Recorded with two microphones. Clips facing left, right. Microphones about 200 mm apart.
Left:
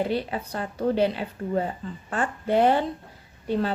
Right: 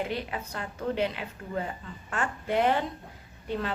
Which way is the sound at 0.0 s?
35° left (ahead or behind).